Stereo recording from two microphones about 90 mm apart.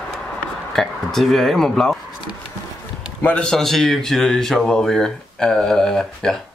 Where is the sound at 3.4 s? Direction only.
5° left (ahead or behind).